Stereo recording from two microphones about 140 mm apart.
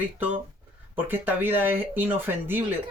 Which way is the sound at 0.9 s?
15° right (ahead or behind).